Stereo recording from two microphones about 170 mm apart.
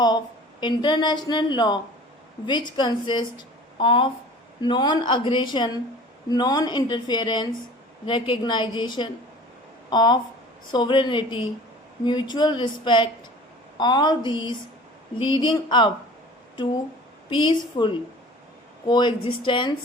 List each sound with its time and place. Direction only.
0.6 s a woman's voice: 25° left (ahead or behind)
17.2 s a woman's voice: 30° left (ahead or behind)